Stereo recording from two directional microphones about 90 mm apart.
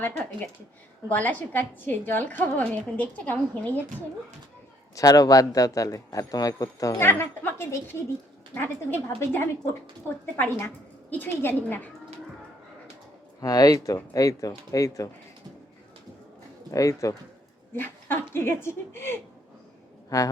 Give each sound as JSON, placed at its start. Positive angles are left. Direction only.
{"t": 1.0, "sound": "a woman's voice", "side_deg": 20}
{"t": 4.9, "sound": "speech", "side_deg": 45}
{"t": 7.0, "sound": "a woman's voice", "side_deg": 25}
{"t": 13.4, "sound": "speech", "side_deg": 45}
{"t": 16.7, "sound": "speech", "side_deg": 40}
{"t": 17.7, "sound": "a woman's voice", "side_deg": 25}
{"t": 20.1, "sound": "speech", "side_deg": 40}